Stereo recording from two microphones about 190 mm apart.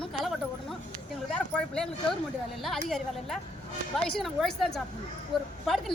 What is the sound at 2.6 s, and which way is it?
Speech, centre (ahead or behind).